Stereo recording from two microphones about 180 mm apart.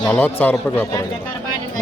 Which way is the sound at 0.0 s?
10° left (ahead or behind).